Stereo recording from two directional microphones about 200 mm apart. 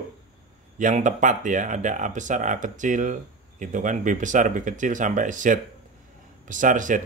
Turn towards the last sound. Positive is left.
turn(degrees=-40)  # may be behind; listen again after turning